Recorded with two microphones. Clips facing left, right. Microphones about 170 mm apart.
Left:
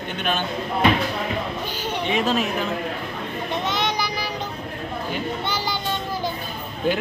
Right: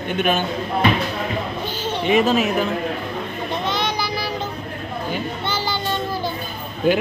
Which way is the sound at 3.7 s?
20° left (ahead or behind).